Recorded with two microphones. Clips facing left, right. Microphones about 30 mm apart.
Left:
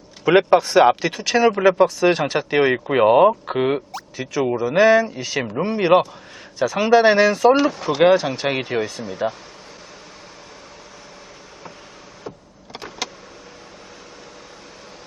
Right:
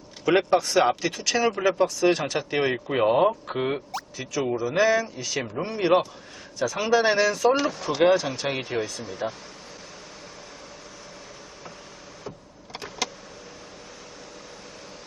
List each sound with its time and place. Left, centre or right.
0.3 s speech: left
12.7 s vehicle: centre